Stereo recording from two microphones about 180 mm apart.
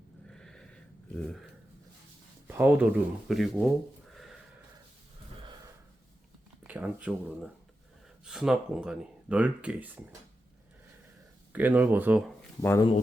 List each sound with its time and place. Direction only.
0.3 s a sound: 5° left (ahead or behind)
2.6 s speech: 10° right (ahead or behind)
6.7 s speech: 10° right (ahead or behind)
11.5 s speech: 10° right (ahead or behind)
12.6 s speech: 15° left (ahead or behind)